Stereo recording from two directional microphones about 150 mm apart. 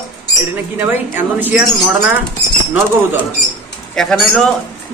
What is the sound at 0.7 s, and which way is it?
Speech, 15° right (ahead or behind).